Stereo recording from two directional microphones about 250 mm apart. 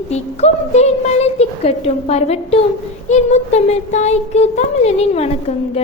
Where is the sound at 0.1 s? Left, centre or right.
Left.